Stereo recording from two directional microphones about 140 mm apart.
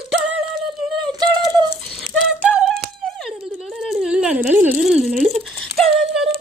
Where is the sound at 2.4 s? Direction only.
10° right (ahead or behind).